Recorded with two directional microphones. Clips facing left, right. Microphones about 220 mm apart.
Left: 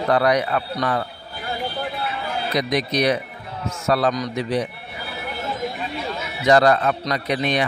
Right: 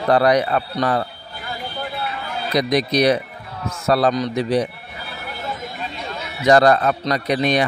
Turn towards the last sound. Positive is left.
turn(degrees=-40)  # may be behind; listen again after turning